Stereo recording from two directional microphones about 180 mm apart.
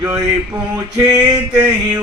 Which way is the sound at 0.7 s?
20° right (ahead or behind).